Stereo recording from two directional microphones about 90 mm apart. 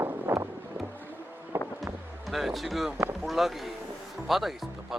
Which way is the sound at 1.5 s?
25° right (ahead or behind).